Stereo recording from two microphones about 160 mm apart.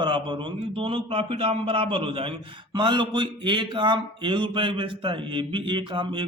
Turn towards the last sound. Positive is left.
turn(degrees=-30)  # may be behind; listen again after turning